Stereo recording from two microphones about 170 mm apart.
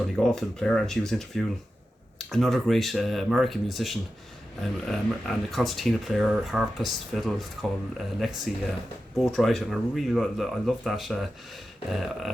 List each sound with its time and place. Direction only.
0.2 s speech: 5° left (ahead or behind)